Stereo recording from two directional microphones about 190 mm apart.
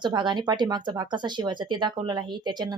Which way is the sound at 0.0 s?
25° right (ahead or behind).